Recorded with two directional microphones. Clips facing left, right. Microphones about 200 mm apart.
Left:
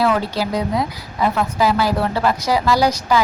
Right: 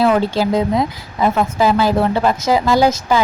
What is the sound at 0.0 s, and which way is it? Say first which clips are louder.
A woman's voice: right 4 dB; 25° right (ahead or behind).